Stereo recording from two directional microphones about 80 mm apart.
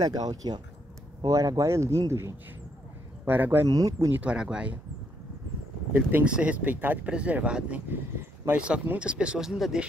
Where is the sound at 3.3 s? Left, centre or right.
Right.